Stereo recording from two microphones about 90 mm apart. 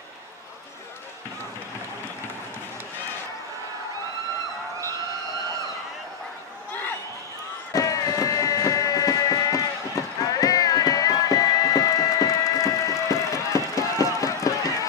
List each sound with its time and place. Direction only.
7.7 s music: 40° left (ahead or behind)